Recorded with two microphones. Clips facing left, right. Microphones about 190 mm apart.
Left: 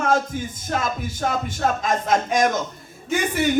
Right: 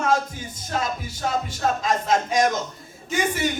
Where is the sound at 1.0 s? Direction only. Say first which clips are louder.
Left 2 dB; 50° left (ahead or behind).